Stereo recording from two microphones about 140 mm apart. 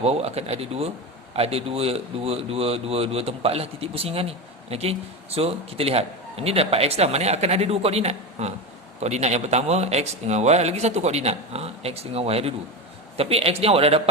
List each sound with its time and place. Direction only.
0.0 s a man's voice: 50° right (ahead or behind)